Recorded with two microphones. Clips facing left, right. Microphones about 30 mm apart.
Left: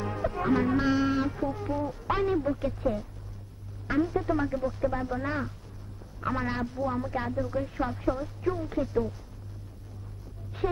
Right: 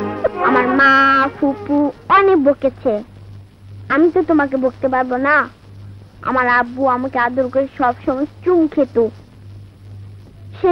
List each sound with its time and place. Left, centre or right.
0.0 s music: right
3.8 s speech: right
10.6 s speech: right